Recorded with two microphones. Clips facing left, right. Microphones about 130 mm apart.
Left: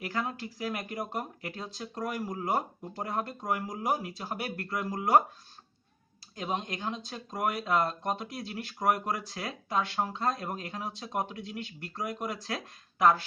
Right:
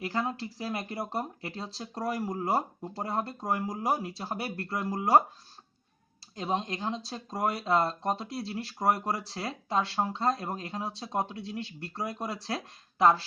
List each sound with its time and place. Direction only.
0.0 s speech: 30° right (ahead or behind)
6.3 s speech: 30° right (ahead or behind)